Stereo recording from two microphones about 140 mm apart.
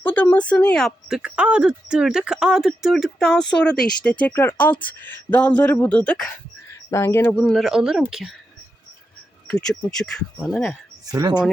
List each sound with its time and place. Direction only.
0.0 s speech: 15° left (ahead or behind)
6.9 s speech: 20° left (ahead or behind); by 8.0 s 5° right (ahead or behind)
9.5 s speech: 5° left (ahead or behind)
11.0 s speech: 25° right (ahead or behind)